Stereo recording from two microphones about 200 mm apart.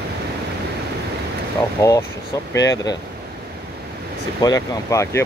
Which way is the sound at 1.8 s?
15° left (ahead or behind).